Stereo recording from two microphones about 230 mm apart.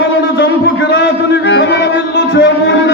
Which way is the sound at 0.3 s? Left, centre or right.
Left.